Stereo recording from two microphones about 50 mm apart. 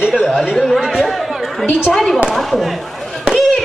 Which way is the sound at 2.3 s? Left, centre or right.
Centre.